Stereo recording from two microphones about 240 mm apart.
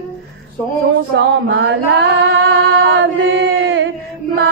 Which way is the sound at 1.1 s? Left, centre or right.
Right.